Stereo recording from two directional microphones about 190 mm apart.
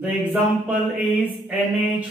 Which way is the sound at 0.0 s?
5° right (ahead or behind).